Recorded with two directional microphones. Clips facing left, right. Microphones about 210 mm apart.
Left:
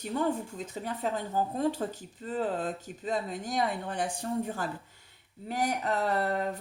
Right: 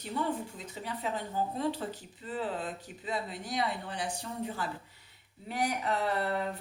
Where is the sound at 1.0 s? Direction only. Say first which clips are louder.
Left 3 dB; 45° left (ahead or behind).